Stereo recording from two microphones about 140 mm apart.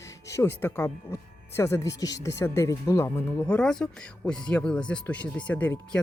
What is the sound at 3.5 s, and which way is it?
Speech, 5° left (ahead or behind).